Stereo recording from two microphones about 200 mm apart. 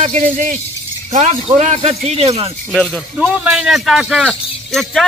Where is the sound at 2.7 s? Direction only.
Centre (ahead or behind).